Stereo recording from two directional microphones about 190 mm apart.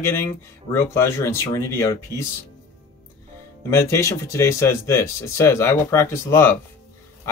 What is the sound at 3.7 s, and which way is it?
Speech, 15° left (ahead or behind).